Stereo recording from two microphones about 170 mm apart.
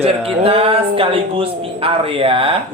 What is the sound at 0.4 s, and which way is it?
A man's voice, 35° right (ahead or behind).